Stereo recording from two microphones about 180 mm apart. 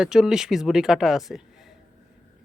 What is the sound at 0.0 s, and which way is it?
Speech, 5° right (ahead or behind).